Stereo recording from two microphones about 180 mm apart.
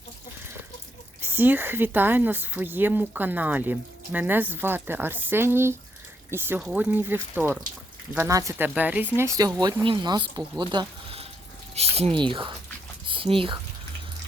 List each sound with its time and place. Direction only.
1.2 s speech: 10° right (ahead or behind)
9.1 s speech: 20° right (ahead or behind)
10.6 s a sound: 25° right (ahead or behind)
11.7 s speech: 35° right (ahead or behind)